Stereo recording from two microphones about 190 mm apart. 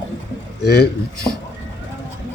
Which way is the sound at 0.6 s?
60° left (ahead or behind).